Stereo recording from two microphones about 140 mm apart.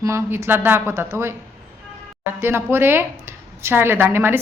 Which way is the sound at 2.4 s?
15° right (ahead or behind).